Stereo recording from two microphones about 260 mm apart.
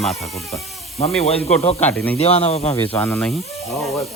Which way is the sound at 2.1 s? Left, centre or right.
Left.